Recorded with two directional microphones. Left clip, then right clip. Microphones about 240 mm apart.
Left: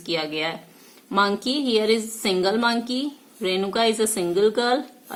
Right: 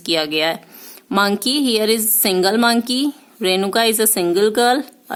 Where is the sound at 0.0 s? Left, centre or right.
Right.